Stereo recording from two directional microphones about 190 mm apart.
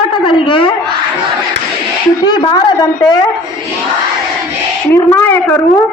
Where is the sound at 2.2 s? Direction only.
20° left (ahead or behind).